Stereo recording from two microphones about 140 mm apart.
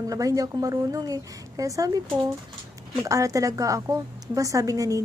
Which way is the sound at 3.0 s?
25° right (ahead or behind).